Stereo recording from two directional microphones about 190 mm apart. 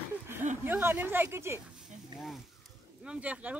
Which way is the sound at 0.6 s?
10° right (ahead or behind).